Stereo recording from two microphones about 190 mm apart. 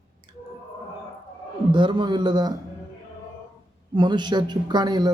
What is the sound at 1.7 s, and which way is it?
Speech, 25° right (ahead or behind).